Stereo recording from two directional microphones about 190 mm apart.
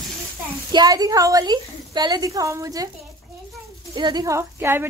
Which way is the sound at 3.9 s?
25° right (ahead or behind).